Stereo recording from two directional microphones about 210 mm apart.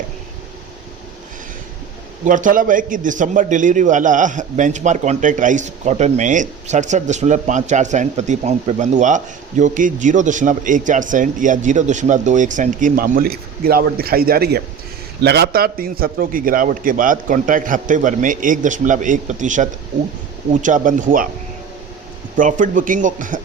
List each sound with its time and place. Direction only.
2.2 s a man's voice: 40° right (ahead or behind)
22.4 s a man's voice: 40° right (ahead or behind)